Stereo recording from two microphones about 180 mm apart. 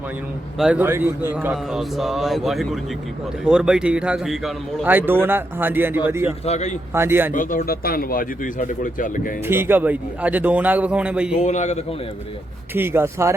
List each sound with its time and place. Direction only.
0.6 s a man's voice: 10° right (ahead or behind)
6.4 s a man's voice: 40° left (ahead or behind)
6.9 s a man's voice: 15° right (ahead or behind)
7.3 s speech: 50° left (ahead or behind)
9.5 s a man's voice: 10° right (ahead or behind)
11.3 s a man's voice: 40° left (ahead or behind)
12.7 s a man's voice: 10° right (ahead or behind)